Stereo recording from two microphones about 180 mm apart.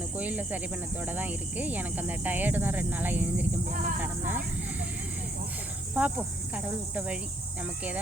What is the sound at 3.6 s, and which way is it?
Speech, 45° right (ahead or behind).